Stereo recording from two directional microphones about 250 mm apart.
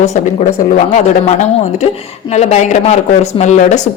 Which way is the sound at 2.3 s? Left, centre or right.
Left.